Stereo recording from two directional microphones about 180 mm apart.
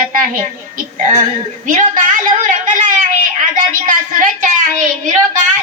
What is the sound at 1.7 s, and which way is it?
A woman's voice, 45° right (ahead or behind).